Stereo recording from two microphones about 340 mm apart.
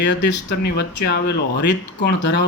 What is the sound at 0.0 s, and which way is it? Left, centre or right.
Speech, left.